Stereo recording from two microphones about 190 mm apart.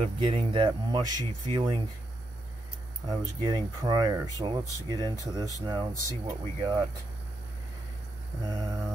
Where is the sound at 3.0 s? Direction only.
25° right (ahead or behind).